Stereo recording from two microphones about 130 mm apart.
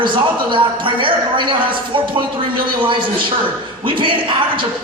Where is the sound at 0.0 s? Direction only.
40° right (ahead or behind).